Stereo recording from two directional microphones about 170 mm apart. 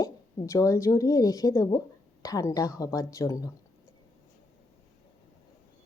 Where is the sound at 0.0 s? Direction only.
20° left (ahead or behind).